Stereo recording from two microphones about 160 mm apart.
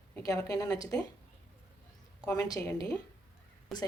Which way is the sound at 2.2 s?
20° left (ahead or behind).